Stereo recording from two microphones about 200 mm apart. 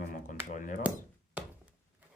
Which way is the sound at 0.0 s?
40° left (ahead or behind).